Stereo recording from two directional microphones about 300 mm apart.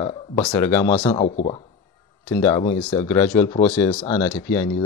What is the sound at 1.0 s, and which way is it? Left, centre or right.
Speech, centre.